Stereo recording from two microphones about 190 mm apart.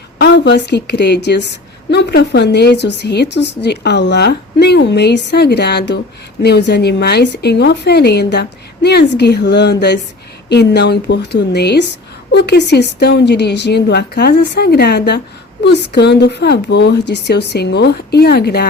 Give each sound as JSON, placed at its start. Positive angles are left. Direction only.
{"t": 0.2, "sound": "a woman's voice", "side_deg": 65}